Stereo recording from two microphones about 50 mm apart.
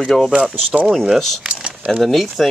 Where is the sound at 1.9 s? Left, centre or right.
Centre.